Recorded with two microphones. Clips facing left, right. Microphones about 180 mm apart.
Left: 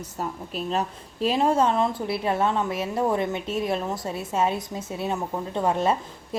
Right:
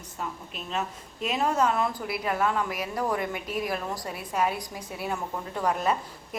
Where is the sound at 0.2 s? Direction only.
35° left (ahead or behind).